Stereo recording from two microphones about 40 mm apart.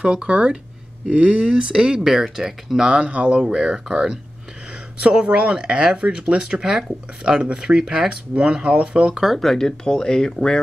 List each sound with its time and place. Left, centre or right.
0.0 s speech: right
1.5 s speech: centre
2.2 s speech: centre
2.9 s speech: right
3.4 s speech: centre
9.4 s speech: centre